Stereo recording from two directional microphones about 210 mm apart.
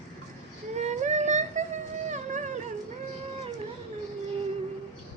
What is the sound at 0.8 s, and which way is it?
Yodeling, 35° right (ahead or behind).